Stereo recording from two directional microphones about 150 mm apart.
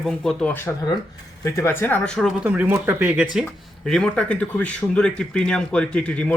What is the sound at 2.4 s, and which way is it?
Speech, 10° right (ahead or behind).